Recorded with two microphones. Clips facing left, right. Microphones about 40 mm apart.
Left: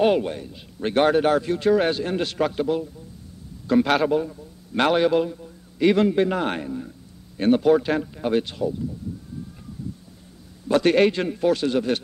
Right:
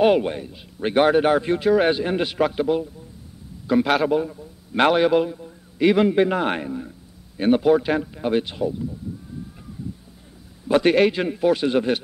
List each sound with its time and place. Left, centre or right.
0.2 s a man's voice: centre
10.7 s a man's voice: centre